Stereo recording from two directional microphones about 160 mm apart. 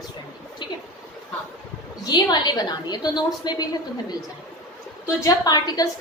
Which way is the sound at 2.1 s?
25° left (ahead or behind).